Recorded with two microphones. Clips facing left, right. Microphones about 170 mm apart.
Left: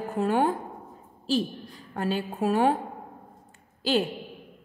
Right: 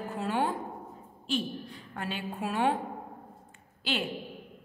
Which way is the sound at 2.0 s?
40° left (ahead or behind).